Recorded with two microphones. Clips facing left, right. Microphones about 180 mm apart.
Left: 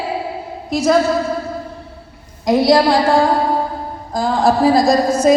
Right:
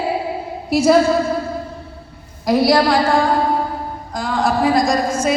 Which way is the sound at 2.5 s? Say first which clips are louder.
Left 2 dB; 25° left (ahead or behind).